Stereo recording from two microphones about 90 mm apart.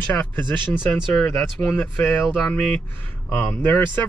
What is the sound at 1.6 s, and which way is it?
Speech, 20° left (ahead or behind).